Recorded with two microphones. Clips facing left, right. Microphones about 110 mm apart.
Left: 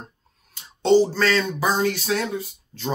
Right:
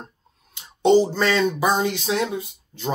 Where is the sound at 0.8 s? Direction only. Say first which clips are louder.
Right 1 dB; 20° right (ahead or behind).